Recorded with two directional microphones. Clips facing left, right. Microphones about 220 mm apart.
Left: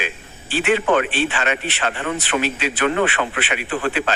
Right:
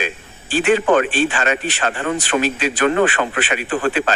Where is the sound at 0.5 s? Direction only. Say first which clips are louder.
Right 3 dB; 45° right (ahead or behind).